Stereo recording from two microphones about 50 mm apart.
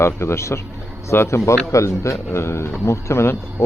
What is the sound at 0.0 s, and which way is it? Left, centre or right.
Speech, left.